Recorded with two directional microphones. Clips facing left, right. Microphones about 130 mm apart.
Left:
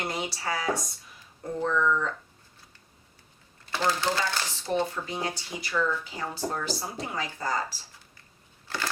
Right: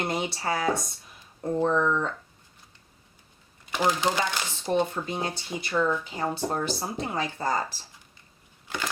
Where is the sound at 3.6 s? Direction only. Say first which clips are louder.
Right 2 dB; 15° right (ahead or behind).